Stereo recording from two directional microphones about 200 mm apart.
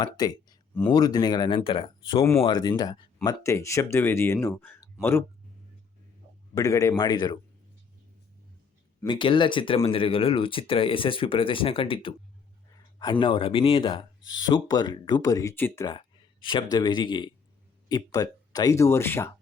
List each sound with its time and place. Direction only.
0.0 s speech: 20° left (ahead or behind)
6.5 s speech: 15° left (ahead or behind)
9.0 s speech: 25° left (ahead or behind)